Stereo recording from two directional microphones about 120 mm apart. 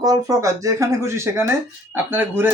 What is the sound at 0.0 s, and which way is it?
Speech, 30° right (ahead or behind).